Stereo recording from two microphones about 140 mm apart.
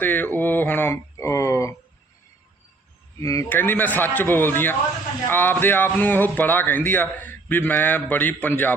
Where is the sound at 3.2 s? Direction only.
25° left (ahead or behind).